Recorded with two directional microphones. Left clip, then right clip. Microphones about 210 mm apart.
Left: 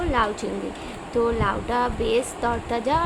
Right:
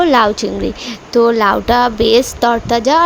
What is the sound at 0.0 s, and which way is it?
A woman's voice, 45° right (ahead or behind).